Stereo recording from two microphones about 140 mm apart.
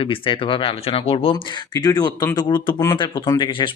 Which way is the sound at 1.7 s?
30° left (ahead or behind).